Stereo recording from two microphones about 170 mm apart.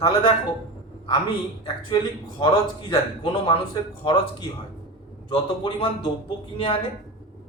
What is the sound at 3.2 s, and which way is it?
Speech, 30° left (ahead or behind).